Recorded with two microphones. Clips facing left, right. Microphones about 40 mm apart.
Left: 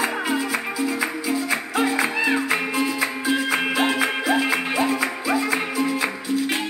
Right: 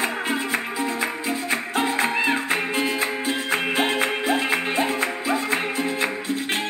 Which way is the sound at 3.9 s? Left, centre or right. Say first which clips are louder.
Left 1 dB; right.